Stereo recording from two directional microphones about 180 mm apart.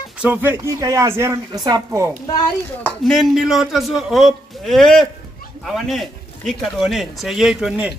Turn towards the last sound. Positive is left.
turn(degrees=-5)  # may be behind; listen again after turning